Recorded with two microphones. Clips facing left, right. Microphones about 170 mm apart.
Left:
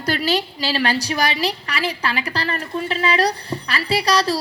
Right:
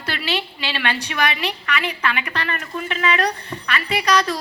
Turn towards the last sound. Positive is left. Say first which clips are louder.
# left 1 dB
turn(degrees=30)  # may be behind; listen again after turning